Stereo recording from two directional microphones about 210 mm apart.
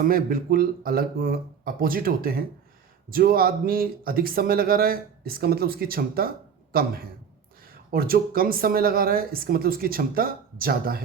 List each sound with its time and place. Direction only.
0.0 s speech: 45° right (ahead or behind)